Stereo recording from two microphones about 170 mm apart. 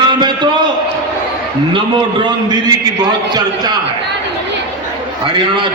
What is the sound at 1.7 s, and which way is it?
A man's voice, 30° right (ahead or behind).